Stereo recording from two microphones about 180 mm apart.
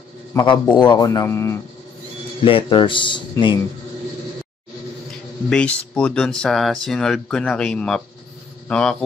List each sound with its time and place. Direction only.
0.3 s speech: 25° left (ahead or behind)
2.4 s speech: 30° left (ahead or behind)
5.5 s speech: 5° left (ahead or behind)